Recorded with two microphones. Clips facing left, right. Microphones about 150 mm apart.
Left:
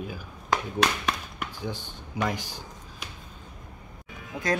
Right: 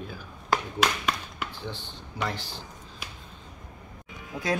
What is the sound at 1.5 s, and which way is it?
Speech, 15° left (ahead or behind).